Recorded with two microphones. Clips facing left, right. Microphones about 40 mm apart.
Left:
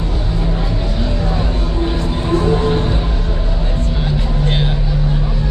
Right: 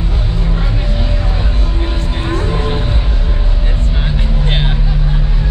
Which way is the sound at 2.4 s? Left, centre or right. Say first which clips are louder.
Left 4 dB; centre.